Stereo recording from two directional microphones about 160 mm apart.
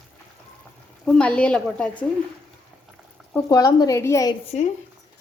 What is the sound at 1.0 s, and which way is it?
A woman's voice, 5° left (ahead or behind).